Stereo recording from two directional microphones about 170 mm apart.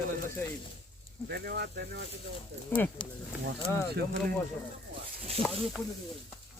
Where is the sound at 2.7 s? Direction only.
10° left (ahead or behind).